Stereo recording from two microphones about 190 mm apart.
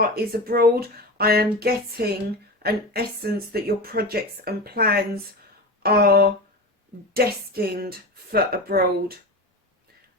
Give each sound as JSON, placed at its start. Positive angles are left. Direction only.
{"t": 0.0, "sound": "speech", "side_deg": -50}